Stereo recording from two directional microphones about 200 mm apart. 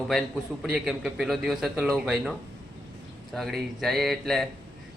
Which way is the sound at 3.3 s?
Centre (ahead or behind).